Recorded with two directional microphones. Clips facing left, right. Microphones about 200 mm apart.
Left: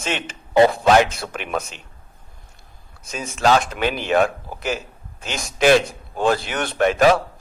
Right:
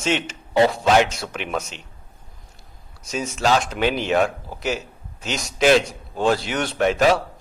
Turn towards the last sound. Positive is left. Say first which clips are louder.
# left 1 dB
turn(degrees=55)  # may be behind; listen again after turning